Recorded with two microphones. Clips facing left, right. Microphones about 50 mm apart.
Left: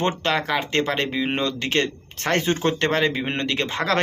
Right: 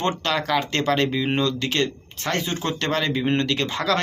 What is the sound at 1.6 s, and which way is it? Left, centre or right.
Speech, left.